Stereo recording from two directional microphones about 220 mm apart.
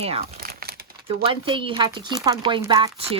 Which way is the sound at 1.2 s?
25° right (ahead or behind).